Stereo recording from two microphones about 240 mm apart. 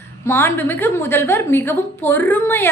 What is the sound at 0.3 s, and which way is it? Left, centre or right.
A woman's voice, centre.